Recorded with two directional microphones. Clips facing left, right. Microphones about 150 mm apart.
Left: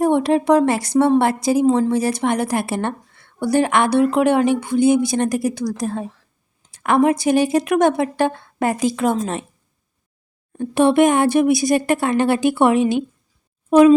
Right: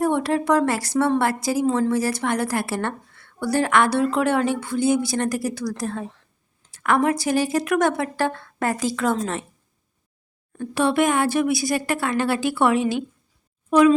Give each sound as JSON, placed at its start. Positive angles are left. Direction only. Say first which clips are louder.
{"t": 0.0, "sound": "a woman's voice", "louder": "left 5 dB", "side_deg": 20}
{"t": 10.6, "sound": "a woman's voice", "louder": "left 6 dB", "side_deg": 20}